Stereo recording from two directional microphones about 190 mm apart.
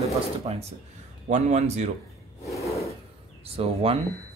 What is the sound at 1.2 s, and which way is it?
Speech, 40° right (ahead or behind).